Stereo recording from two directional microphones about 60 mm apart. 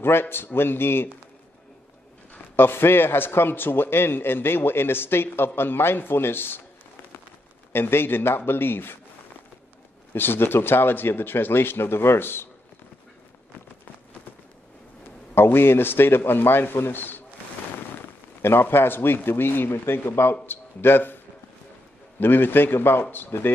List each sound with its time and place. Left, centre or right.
0.0 s a man's voice: left
2.5 s a man's voice: left
7.7 s a man's voice: left
10.1 s a man's voice: left
15.0 s a man's voice: left
18.4 s a man's voice: left
22.2 s a man's voice: left